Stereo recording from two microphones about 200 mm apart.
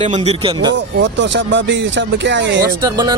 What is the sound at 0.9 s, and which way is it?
A man's voice, 65° right (ahead or behind).